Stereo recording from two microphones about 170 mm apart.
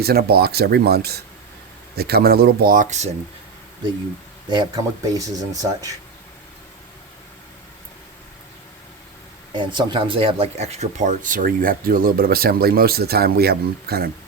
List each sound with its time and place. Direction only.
0.0 s speech: 65° right (ahead or behind); by 3.1 s 45° right (ahead or behind)
4.4 s speech: 25° right (ahead or behind)
9.5 s speech: 25° right (ahead or behind); by 14.1 s 65° right (ahead or behind)